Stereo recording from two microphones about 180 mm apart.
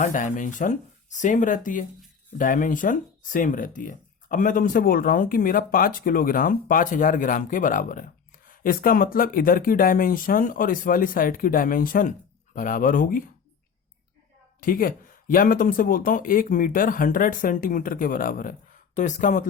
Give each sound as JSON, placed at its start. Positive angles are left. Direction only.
{"t": 0.0, "sound": "speech", "side_deg": 45}
{"t": 14.6, "sound": "speech", "side_deg": 50}